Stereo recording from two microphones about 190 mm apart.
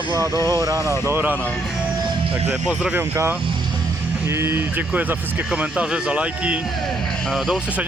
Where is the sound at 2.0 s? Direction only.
25° right (ahead or behind).